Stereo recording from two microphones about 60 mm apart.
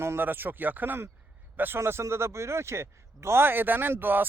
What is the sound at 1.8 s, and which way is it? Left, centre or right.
A man's voice, right.